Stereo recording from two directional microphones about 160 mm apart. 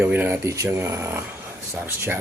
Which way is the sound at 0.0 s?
10° right (ahead or behind).